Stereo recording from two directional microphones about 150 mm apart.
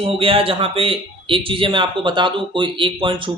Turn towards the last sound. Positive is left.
turn(degrees=-35)  # may be behind; listen again after turning